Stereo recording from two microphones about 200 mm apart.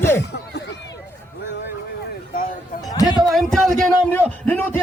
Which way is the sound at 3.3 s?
Centre (ahead or behind).